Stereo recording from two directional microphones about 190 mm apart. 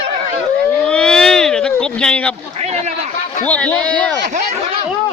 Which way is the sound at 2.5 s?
35° right (ahead or behind).